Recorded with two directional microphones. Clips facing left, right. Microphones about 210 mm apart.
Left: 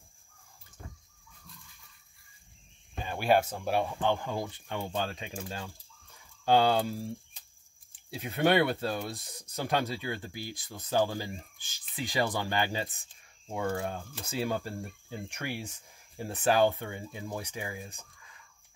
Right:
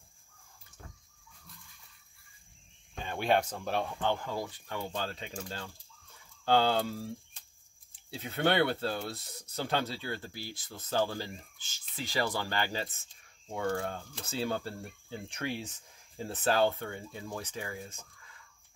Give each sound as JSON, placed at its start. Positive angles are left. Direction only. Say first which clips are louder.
{"t": 2.9, "sound": "speech", "louder": "left 3 dB", "side_deg": 5}
{"t": 8.1, "sound": "speech", "louder": "left 3 dB", "side_deg": 15}